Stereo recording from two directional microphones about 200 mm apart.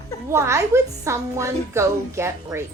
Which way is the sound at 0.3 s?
15° right (ahead or behind).